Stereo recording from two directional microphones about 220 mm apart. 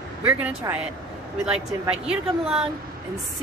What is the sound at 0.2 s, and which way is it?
A woman's voice, 5° right (ahead or behind).